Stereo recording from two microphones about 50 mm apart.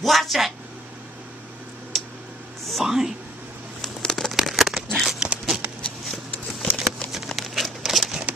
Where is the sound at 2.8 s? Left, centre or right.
Centre.